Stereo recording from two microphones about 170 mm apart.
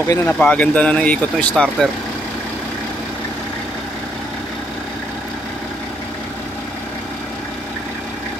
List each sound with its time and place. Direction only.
0.1 s speech: 15° left (ahead or behind)